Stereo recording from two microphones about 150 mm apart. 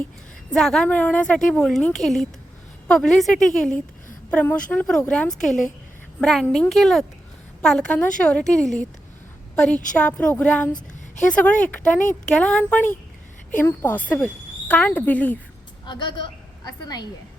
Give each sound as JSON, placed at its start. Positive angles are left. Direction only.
{"t": 0.5, "sound": "a woman's voice", "side_deg": 5}
{"t": 15.9, "sound": "a woman's voice", "side_deg": 30}